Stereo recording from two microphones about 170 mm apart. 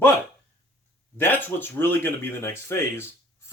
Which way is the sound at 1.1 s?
10° left (ahead or behind).